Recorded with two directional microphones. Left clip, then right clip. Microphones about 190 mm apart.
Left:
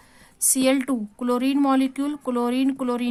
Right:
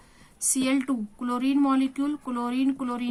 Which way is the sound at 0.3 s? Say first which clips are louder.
Left 5 dB; 35° left (ahead or behind).